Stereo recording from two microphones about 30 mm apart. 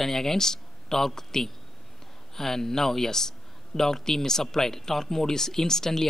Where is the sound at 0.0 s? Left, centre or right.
Centre.